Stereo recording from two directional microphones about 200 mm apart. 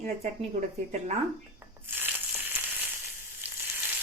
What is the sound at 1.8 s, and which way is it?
Crushing, 10° right (ahead or behind).